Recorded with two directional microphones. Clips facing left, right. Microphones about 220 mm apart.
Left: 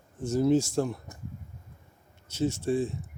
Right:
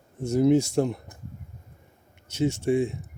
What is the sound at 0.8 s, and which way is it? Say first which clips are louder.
Speech: right 4 dB; 20° right (ahead or behind).